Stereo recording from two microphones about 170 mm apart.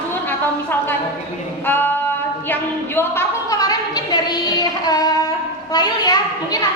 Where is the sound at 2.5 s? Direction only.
15° left (ahead or behind).